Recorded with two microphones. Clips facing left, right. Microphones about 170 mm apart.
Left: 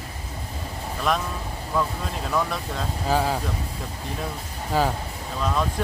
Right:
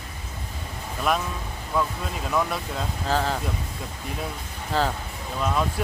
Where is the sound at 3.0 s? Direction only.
10° left (ahead or behind).